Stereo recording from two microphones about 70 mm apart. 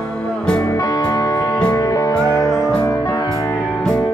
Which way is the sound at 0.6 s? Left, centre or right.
Left.